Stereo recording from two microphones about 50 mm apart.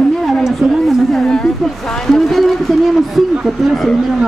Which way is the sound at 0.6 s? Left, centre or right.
Centre.